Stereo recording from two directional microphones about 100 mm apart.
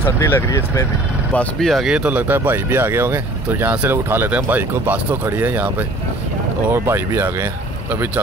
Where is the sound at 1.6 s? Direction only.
Centre (ahead or behind).